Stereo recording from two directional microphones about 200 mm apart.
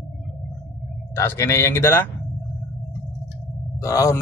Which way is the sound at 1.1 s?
10° left (ahead or behind).